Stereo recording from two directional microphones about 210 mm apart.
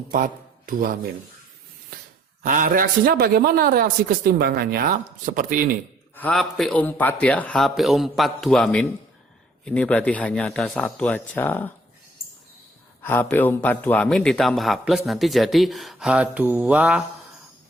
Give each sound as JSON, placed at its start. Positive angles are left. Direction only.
{"t": 0.1, "sound": "speech", "side_deg": -40}
{"t": 2.4, "sound": "a man's voice", "side_deg": -40}
{"t": 6.1, "sound": "speech", "side_deg": 5}
{"t": 13.0, "sound": "speech", "side_deg": 10}